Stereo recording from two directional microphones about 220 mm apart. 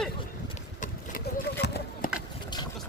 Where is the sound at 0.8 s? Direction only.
45° left (ahead or behind).